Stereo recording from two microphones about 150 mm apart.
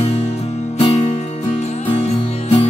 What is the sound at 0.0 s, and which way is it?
Music, 45° left (ahead or behind).